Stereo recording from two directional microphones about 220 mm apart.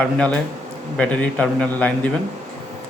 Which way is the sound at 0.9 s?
5° left (ahead or behind).